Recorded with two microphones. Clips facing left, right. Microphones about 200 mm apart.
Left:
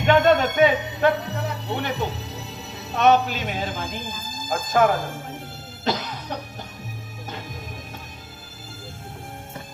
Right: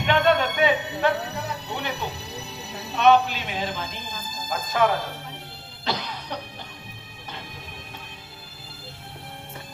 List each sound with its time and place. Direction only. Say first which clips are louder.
0.0 s a sound: left 4 dB; 45° left (ahead or behind)
1.7 s music: left 5 dB; 45° left (ahead or behind)
2.9 s speech: even; 45° left (ahead or behind)
5.8 s music: left 4 dB; 45° left (ahead or behind)